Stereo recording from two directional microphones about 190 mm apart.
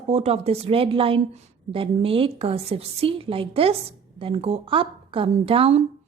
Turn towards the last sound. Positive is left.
turn(degrees=-30)  # may be behind; listen again after turning